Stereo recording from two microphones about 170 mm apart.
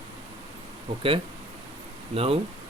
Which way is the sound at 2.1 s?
35° right (ahead or behind).